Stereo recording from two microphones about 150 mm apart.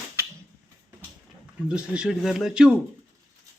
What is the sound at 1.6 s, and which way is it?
Speech, 5° right (ahead or behind).